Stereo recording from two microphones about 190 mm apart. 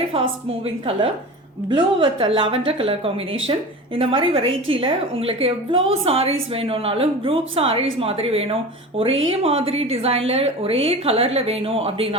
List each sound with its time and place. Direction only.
0.1 s a woman's voice: 30° right (ahead or behind)
9.0 s speech: 90° right
9.3 s speech: 30° right (ahead or behind)